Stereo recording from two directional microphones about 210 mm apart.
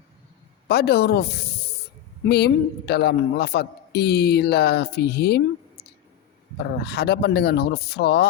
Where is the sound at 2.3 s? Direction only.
50° left (ahead or behind).